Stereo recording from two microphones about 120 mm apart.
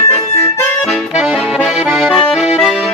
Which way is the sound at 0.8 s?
Centre (ahead or behind).